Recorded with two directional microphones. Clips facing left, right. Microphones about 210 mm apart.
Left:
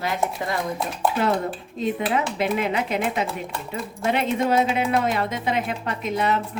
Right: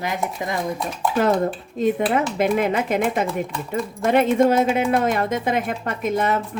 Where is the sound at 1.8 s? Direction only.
50° right (ahead or behind).